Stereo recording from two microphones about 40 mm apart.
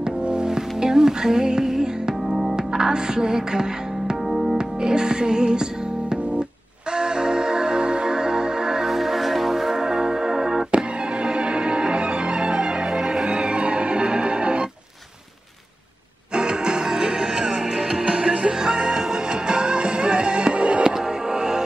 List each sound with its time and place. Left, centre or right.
0.0 s music: right
4.3 s music: centre
4.6 s music: centre
8.9 s music: centre
11.2 s music: right
16.3 s music: right
20.9 s music: centre